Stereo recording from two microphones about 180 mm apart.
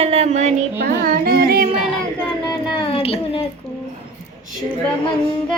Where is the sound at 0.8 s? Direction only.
55° right (ahead or behind).